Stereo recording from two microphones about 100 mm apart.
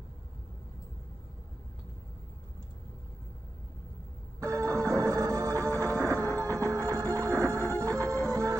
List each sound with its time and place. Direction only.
4.4 s music: 30° right (ahead or behind)